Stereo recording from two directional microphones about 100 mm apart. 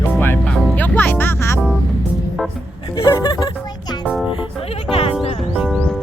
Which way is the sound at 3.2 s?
45° left (ahead or behind).